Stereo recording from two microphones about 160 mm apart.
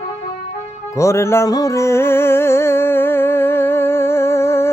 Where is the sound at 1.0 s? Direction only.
15° left (ahead or behind).